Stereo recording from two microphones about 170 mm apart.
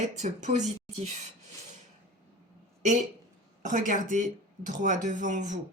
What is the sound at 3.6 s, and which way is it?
Speech, 50° right (ahead or behind).